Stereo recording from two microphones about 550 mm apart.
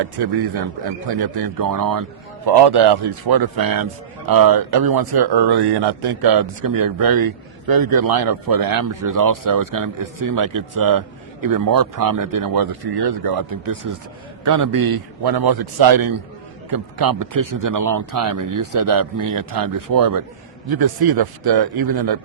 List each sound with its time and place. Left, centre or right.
0.0 s a man's voice: right